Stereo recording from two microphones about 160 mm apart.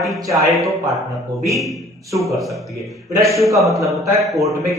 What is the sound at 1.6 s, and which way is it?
A man's voice, centre (ahead or behind).